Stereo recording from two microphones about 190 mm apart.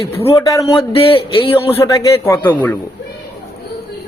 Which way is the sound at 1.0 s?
30° left (ahead or behind).